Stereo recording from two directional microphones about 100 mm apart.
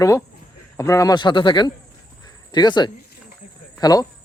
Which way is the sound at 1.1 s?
50° left (ahead or behind).